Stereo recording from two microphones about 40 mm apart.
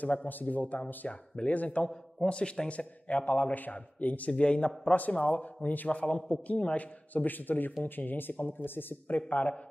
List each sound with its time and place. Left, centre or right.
0.0 s a man's voice: left
1.0 s a man's voice: left
1.5 s a man's voice: left
2.2 s a man's voice: left
4.3 s a man's voice: left
5.9 s a man's voice: left
7.2 s speech: left
9.1 s a man's voice: left